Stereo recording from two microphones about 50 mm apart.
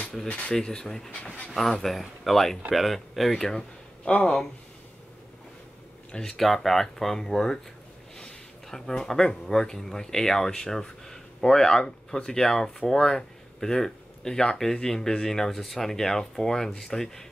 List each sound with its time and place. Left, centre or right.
0.3 s speech: centre
4.0 s speech: centre
6.1 s speech: centre
8.2 s a sound: centre
9.2 s speech: centre